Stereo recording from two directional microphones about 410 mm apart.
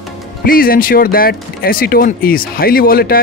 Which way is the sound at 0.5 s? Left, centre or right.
Left.